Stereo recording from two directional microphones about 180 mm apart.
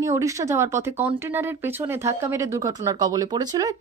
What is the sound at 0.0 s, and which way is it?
A woman's voice, 15° right (ahead or behind).